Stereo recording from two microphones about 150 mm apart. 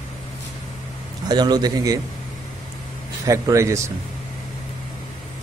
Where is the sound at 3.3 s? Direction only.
20° right (ahead or behind).